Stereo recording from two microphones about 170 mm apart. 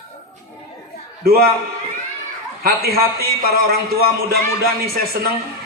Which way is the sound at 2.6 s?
60° right (ahead or behind).